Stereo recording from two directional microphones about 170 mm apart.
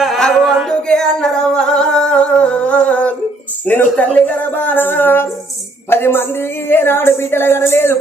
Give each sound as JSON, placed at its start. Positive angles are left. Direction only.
{"t": 0.0, "sound": "singing", "side_deg": 0}
{"t": 3.7, "sound": "a woman's voice", "side_deg": 10}